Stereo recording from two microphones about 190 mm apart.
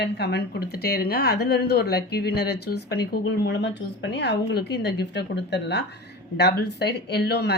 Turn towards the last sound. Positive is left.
turn(degrees=60)  # may be behind; listen again after turning